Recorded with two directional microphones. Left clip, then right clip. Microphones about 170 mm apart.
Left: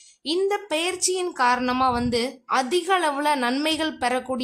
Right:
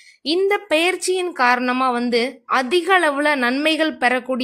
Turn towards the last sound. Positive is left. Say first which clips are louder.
# right 6 dB
turn(degrees=-10)  # may be behind; listen again after turning